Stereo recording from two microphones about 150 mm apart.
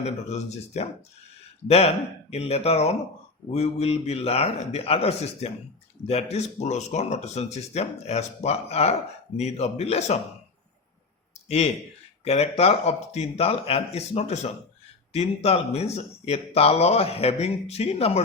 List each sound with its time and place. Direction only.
0.0 s speech: 50° left (ahead or behind)
11.4 s speech: 45° left (ahead or behind)